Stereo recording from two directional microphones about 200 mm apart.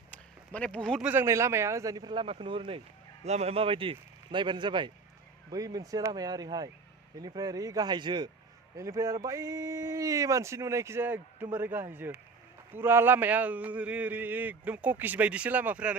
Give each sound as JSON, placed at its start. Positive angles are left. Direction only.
{"t": 0.1, "sound": "a man's voice", "side_deg": 5}